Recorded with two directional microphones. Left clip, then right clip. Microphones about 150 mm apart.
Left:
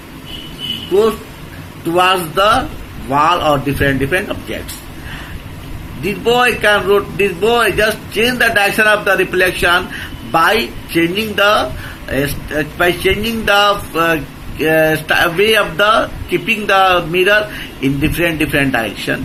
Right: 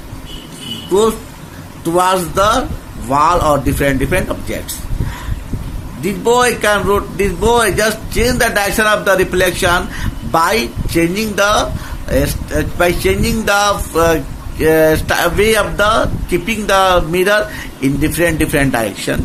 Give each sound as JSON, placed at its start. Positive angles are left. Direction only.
{"t": 1.9, "sound": "a man's voice", "side_deg": -65}
{"t": 3.1, "sound": "a man's voice", "side_deg": -65}
{"t": 6.1, "sound": "a man's voice", "side_deg": -65}